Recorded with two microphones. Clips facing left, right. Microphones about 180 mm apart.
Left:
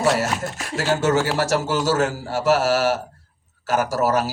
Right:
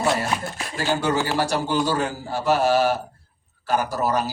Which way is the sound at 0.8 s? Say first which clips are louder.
Left 3 dB; 90° left.